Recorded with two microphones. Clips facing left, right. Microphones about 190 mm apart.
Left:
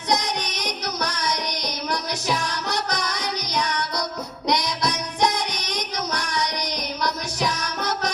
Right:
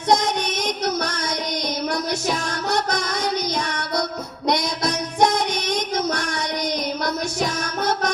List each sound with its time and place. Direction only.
0.1 s child singing: 50° right (ahead or behind)
1.9 s music: 50° right (ahead or behind)
4.4 s child singing: 50° right (ahead or behind)